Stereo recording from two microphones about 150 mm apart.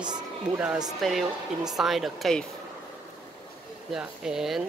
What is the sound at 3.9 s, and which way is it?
Speech, 5° right (ahead or behind).